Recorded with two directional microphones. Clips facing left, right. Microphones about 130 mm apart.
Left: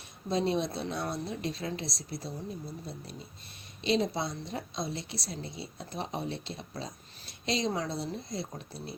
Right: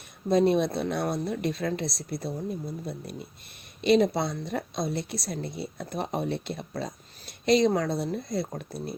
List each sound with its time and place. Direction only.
0.3 s a woman's voice: 55° right (ahead or behind)
3.8 s a woman's voice: 60° right (ahead or behind)